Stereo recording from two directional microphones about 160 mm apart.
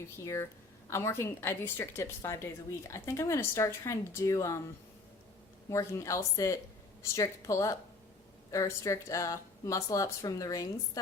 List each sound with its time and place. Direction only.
0.9 s a woman's voice: 15° left (ahead or behind)
5.6 s speech: 20° left (ahead or behind)